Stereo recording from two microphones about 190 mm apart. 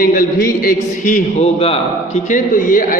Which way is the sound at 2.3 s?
45° left (ahead or behind).